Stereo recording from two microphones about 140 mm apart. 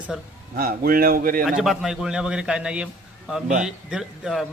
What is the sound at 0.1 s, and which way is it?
Speech, 5° right (ahead or behind).